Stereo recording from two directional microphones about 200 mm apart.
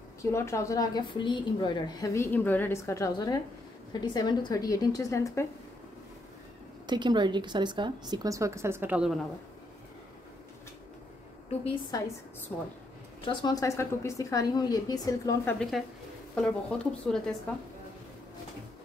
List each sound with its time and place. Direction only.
0.2 s a woman's voice: 15° left (ahead or behind)
6.9 s a woman's voice: 20° right (ahead or behind); by 9.2 s 5° right (ahead or behind)
11.9 s a woman's voice: 20° left (ahead or behind)
13.2 s a woman's voice: 25° left (ahead or behind)
16.3 s speech: 5° left (ahead or behind)